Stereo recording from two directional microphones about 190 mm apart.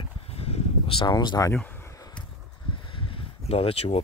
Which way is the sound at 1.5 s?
10° left (ahead or behind).